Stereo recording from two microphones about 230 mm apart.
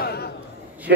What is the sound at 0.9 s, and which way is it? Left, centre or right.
Speech, right.